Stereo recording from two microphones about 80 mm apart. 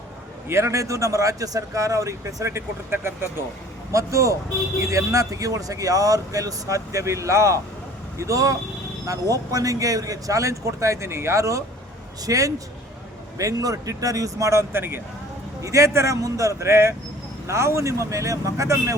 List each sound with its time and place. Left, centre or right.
0.4 s speech: right
3.9 s speech: right
15.6 s speech: right